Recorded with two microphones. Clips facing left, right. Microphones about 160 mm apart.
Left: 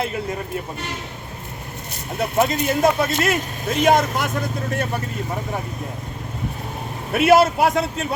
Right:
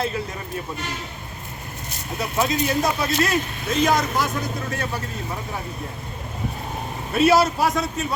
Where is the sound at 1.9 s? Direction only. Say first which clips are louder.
Left 4 dB; 55° left (ahead or behind).